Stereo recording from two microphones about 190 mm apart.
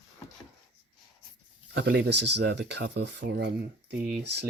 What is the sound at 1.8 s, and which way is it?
Speech, 60° right (ahead or behind).